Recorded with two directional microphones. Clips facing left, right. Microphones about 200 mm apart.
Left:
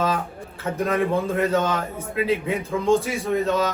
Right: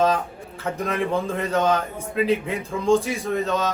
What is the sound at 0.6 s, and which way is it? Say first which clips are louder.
Speech: left 2 dB; centre (ahead or behind).